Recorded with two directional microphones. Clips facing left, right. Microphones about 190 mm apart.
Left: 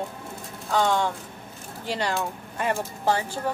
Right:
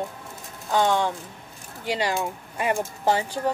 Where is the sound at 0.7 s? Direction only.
15° right (ahead or behind).